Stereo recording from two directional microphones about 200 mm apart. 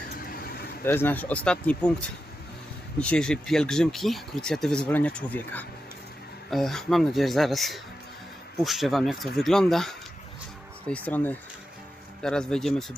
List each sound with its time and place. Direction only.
0.9 s speech: 10° left (ahead or behind)
3.0 s speech: 5° left (ahead or behind)